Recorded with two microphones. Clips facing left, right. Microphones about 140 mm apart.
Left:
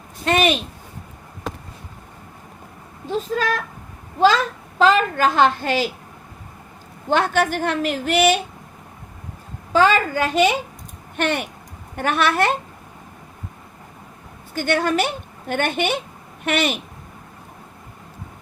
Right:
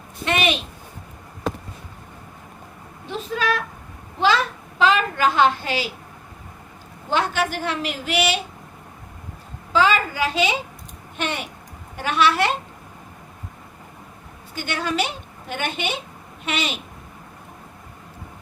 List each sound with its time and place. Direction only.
0.3 s a woman's voice: 45° left (ahead or behind)
3.2 s a sound: 40° left (ahead or behind)
4.8 s a woman's voice: 45° left (ahead or behind)
7.1 s a woman's voice: 50° left (ahead or behind)
9.7 s a woman's voice: 50° left (ahead or behind)
14.5 s a woman's voice: 50° left (ahead or behind)